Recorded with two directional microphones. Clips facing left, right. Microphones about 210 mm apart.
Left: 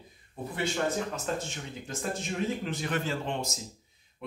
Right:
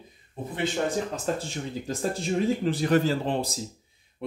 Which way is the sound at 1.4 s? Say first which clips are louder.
Right 6 dB; 35° right (ahead or behind).